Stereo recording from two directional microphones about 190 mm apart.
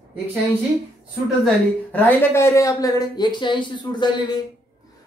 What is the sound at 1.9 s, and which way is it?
Speech, 10° left (ahead or behind).